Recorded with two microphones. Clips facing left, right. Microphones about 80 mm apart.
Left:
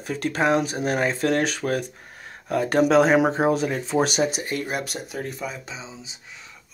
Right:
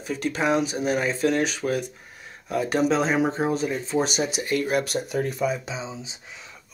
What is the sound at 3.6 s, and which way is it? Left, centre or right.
Speech, left.